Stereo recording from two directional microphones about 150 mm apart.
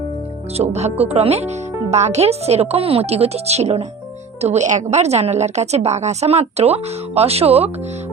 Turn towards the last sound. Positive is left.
turn(degrees=-45)  # may be behind; listen again after turning